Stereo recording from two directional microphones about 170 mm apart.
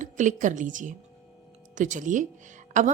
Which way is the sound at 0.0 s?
45° right (ahead or behind).